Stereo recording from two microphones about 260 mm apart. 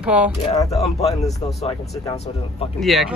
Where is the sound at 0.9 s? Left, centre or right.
Left.